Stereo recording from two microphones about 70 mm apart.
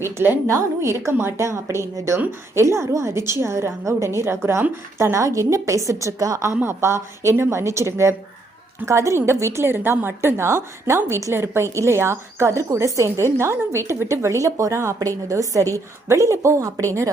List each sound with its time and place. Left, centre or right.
0.0 s a woman's voice: right